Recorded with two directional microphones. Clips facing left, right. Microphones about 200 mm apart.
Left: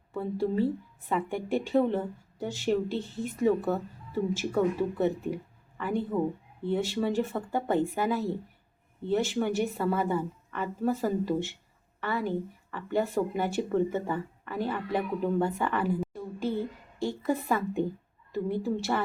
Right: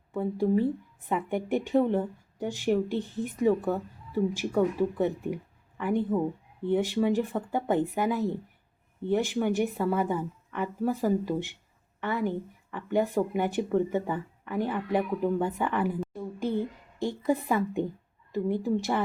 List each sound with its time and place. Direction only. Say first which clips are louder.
0.1 s a woman's voice: right 3 dB; 15° right (ahead or behind)